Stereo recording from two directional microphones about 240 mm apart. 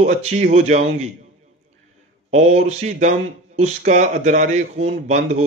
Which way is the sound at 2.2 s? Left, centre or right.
Right.